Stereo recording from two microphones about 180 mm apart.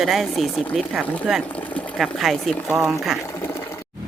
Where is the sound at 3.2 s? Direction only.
15° left (ahead or behind).